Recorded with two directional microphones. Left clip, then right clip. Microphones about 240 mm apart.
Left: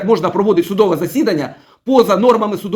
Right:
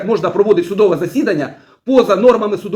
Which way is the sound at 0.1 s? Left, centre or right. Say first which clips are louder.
Right 1 dB; left.